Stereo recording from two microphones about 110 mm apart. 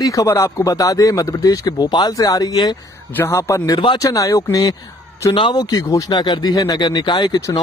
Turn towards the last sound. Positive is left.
turn(degrees=40)  # may be behind; listen again after turning